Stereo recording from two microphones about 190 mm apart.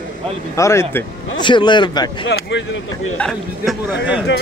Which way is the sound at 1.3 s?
25° left (ahead or behind).